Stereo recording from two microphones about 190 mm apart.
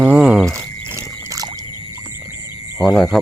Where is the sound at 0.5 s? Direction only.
15° right (ahead or behind).